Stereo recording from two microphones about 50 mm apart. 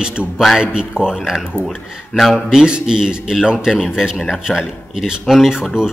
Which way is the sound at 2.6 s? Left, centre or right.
Centre.